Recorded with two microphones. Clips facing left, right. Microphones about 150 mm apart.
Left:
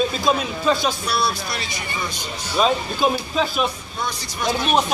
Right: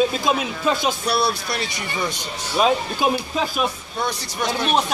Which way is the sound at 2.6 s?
10° right (ahead or behind).